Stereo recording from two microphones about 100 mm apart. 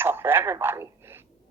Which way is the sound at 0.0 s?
25° right (ahead or behind).